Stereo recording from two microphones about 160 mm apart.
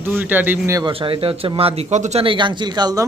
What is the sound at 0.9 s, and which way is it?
Speech, 35° right (ahead or behind).